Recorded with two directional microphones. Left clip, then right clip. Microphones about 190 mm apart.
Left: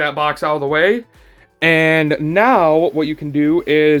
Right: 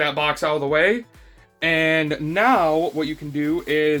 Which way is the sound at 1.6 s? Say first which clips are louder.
Left 6 dB; 55° left (ahead or behind).